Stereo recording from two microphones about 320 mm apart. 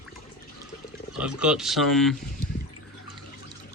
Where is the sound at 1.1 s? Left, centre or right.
Centre.